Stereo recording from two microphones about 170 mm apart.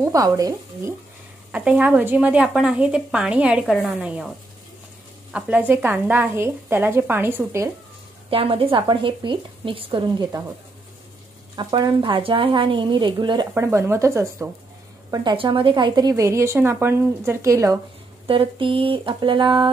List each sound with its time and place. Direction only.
0.0 s a woman's voice: 20° right (ahead or behind)
1.5 s a woman's voice: 10° right (ahead or behind)
5.3 s a woman's voice: 10° right (ahead or behind)
8.3 s speech: 35° right (ahead or behind)
11.5 s a woman's voice: 25° right (ahead or behind)
13.6 s a woman's voice: 15° right (ahead or behind)
18.2 s a woman's voice: 30° right (ahead or behind)